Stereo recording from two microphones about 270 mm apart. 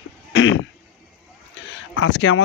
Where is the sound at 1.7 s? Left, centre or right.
Left.